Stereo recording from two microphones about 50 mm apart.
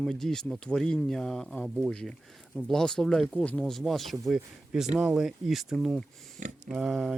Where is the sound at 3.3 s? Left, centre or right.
Left.